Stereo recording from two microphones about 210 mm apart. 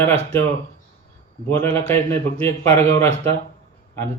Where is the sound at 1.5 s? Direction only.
10° left (ahead or behind).